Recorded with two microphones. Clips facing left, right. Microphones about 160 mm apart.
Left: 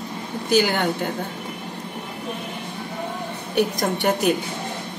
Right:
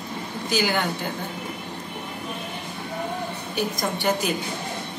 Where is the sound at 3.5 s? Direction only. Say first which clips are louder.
Left 6 dB; 65° left (ahead or behind).